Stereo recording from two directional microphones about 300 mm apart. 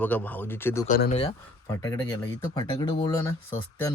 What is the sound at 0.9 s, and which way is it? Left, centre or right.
Speech, left.